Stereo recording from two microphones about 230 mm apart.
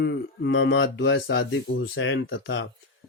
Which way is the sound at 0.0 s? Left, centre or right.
Left.